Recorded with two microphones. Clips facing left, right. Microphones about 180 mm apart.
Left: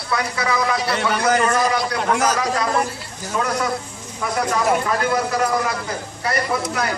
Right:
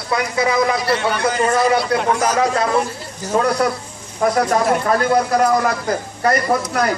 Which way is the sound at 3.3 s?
40° right (ahead or behind).